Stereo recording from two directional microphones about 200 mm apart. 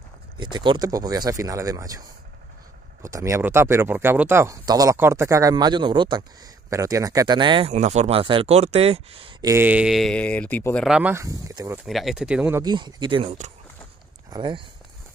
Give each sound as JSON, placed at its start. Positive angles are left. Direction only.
{"t": 0.4, "sound": "speech", "side_deg": -20}
{"t": 11.8, "sound": "speech", "side_deg": 0}
{"t": 12.7, "sound": "speech", "side_deg": -20}